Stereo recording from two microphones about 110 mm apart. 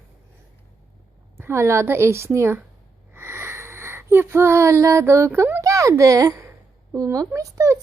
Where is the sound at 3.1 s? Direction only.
20° right (ahead or behind).